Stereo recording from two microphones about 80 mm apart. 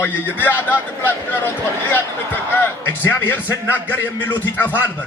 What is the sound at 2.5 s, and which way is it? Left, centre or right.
A man's voice, left.